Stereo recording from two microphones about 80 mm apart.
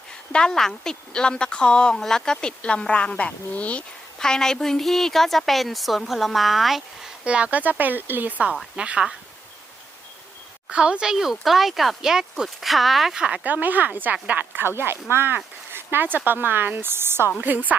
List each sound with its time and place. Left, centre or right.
0.3 s a woman's voice: centre
7.3 s speech: centre
8.7 s speech: centre
10.7 s speech: centre